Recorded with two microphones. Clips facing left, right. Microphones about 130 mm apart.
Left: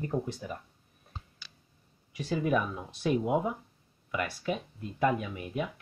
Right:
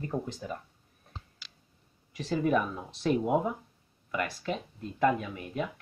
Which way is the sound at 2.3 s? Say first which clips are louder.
Right 1 dB; 5° left (ahead or behind).